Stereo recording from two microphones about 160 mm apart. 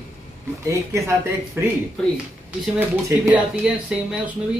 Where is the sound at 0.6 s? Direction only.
20° right (ahead or behind).